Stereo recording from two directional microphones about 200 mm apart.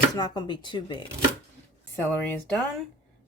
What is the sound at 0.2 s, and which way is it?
Speech, 20° left (ahead or behind).